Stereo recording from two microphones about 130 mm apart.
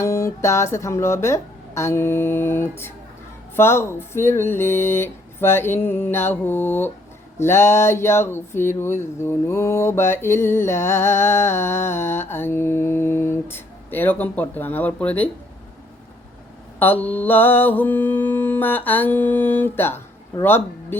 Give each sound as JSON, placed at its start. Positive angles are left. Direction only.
{"t": 0.0, "sound": "speech", "side_deg": 20}
{"t": 16.8, "sound": "speech", "side_deg": 15}